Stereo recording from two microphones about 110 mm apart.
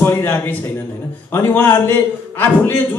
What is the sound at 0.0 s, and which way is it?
A man's voice, 20° left (ahead or behind).